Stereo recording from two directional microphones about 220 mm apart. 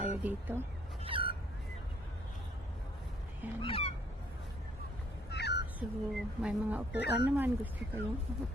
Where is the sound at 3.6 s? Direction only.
25° left (ahead or behind).